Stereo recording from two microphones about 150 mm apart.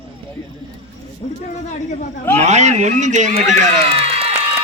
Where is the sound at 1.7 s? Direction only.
60° left (ahead or behind).